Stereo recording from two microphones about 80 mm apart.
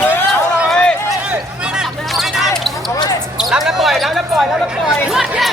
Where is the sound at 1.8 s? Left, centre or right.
Centre.